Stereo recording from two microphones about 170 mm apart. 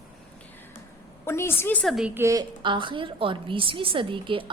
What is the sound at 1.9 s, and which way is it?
Speech, 5° right (ahead or behind).